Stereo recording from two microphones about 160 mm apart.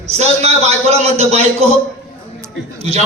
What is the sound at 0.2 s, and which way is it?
A man's voice, 40° right (ahead or behind).